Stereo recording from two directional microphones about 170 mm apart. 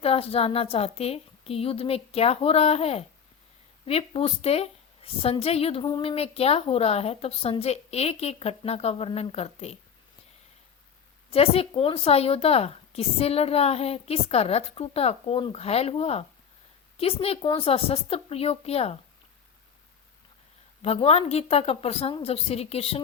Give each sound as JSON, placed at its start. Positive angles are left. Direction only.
{"t": 0.0, "sound": "a woman's voice", "side_deg": 35}
{"t": 11.3, "sound": "a woman's voice", "side_deg": 35}
{"t": 20.8, "sound": "a woman's voice", "side_deg": 35}